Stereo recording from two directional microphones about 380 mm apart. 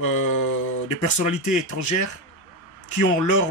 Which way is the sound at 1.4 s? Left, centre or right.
Left.